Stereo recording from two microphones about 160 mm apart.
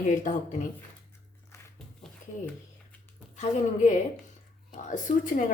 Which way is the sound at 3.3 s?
50° left (ahead or behind).